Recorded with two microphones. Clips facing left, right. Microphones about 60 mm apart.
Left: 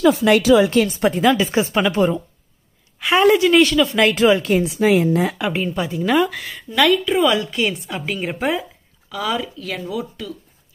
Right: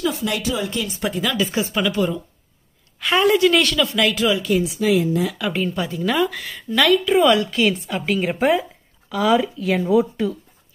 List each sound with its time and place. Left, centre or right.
0.0 s speech: left
0.9 s a woman's voice: left
1.5 s speech: left
3.0 s a woman's voice: centre
4.1 s a woman's voice: left
5.6 s a woman's voice: centre
9.8 s speech: right